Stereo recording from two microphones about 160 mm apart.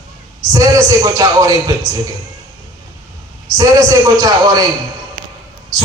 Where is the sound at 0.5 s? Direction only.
20° right (ahead or behind).